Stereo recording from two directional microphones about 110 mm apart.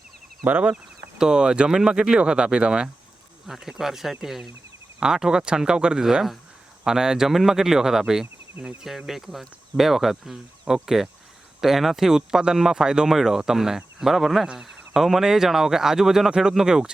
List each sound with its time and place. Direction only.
0.4 s speech: 15° right (ahead or behind)